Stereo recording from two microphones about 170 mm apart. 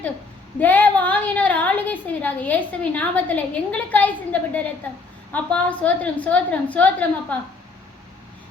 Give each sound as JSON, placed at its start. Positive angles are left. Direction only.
{"t": 0.6, "sound": "a woman's voice", "side_deg": 10}